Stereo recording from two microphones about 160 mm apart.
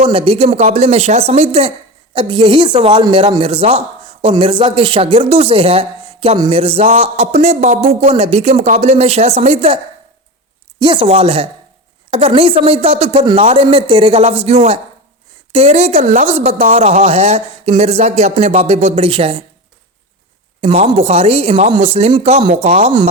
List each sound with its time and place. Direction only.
0.0 s a woman's voice: 35° right (ahead or behind)
20.6 s a woman's voice: 40° right (ahead or behind)